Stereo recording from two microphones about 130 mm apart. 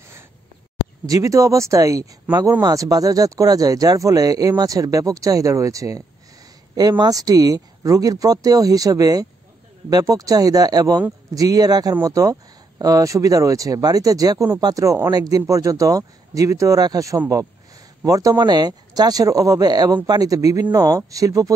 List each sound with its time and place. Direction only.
1.0 s speech: 25° right (ahead or behind)